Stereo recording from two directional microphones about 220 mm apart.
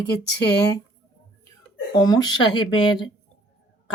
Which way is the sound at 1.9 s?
20° left (ahead or behind).